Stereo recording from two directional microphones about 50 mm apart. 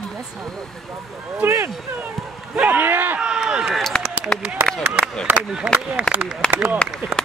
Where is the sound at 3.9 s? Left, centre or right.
Left.